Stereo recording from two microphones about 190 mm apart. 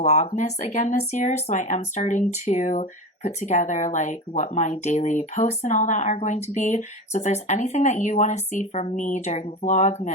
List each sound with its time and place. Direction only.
0.0 s speech: 35° left (ahead or behind)